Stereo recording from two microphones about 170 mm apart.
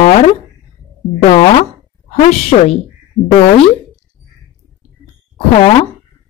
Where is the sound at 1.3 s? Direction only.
35° left (ahead or behind).